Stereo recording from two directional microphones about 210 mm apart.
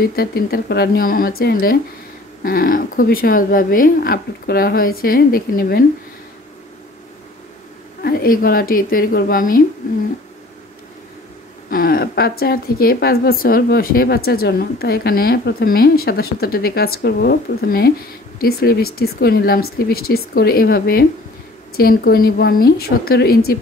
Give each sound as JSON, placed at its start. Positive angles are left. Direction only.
{"t": 0.0, "sound": "a woman's voice", "side_deg": 45}
{"t": 8.0, "sound": "a woman's voice", "side_deg": 45}
{"t": 11.7, "sound": "a woman's voice", "side_deg": 45}